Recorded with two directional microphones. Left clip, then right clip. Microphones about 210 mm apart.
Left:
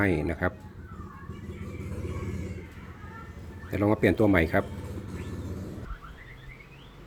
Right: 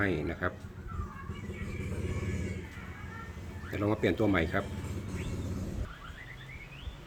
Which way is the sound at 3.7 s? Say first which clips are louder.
Left 6 dB; 35° left (ahead or behind).